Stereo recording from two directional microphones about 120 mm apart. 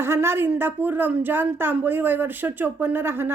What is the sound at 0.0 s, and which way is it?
A woman's voice, 20° right (ahead or behind).